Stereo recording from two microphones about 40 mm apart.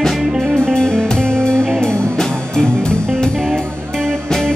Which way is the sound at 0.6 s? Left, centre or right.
Centre.